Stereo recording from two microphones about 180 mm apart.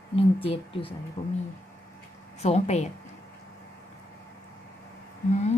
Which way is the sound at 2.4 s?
35° left (ahead or behind).